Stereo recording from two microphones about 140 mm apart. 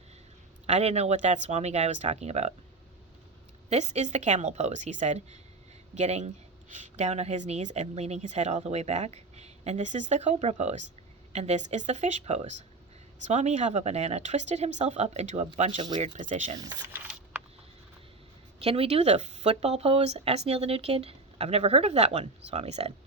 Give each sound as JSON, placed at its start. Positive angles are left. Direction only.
{"t": 0.7, "sound": "speech", "side_deg": -50}
{"t": 3.7, "sound": "a woman's voice", "side_deg": -55}
{"t": 16.9, "sound": "a sound", "side_deg": -10}
{"t": 18.6, "sound": "speech", "side_deg": -45}